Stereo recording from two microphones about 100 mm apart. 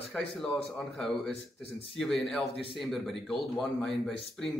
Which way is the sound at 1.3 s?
90° left.